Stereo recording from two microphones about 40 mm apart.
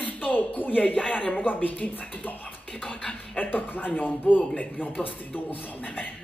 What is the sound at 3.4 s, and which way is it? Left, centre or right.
Speech, left.